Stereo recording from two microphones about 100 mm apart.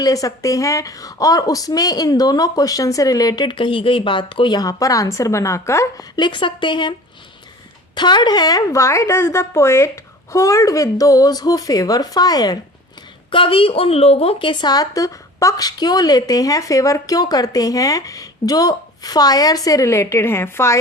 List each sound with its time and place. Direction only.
0.0 s speech: 35° left (ahead or behind); by 4.5 s 55° left (ahead or behind)
4.5 s speech: 40° left (ahead or behind)
6.1 s speech: 50° left (ahead or behind)
7.9 s speech: 50° left (ahead or behind)
13.3 s speech: 60° left (ahead or behind); by 20.7 s 25° left (ahead or behind)